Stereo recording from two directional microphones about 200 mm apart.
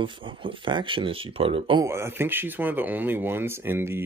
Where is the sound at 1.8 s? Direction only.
10° right (ahead or behind).